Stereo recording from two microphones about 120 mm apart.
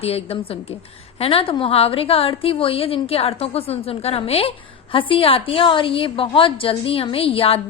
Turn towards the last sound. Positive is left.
turn(degrees=50)  # may be behind; listen again after turning